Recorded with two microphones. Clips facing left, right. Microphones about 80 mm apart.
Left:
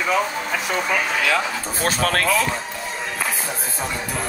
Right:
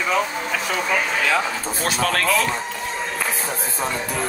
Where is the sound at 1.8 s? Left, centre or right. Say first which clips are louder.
Left 1 dB; left.